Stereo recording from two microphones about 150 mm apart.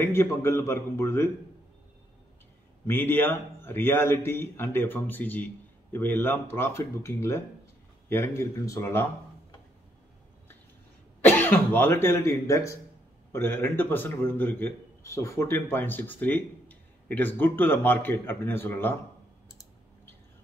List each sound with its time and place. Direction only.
0.0 s a man's voice: 15° left (ahead or behind)
2.9 s a man's voice: 15° left (ahead or behind)
11.1 s a man's voice: 10° left (ahead or behind)